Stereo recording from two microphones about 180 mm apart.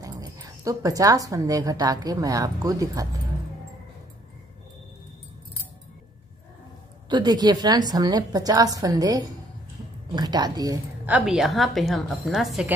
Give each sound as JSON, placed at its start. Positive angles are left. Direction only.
{"t": 0.0, "sound": "speech", "side_deg": -20}
{"t": 7.1, "sound": "a woman's voice", "side_deg": -25}
{"t": 11.1, "sound": "a woman's voice", "side_deg": -5}